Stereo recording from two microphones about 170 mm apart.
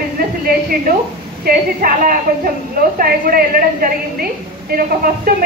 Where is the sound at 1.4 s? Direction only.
60° right (ahead or behind).